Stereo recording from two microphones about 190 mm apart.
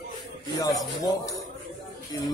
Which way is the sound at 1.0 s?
15° left (ahead or behind).